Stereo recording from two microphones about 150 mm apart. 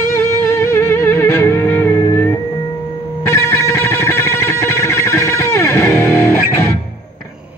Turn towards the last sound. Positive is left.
turn(degrees=15)  # may be behind; listen again after turning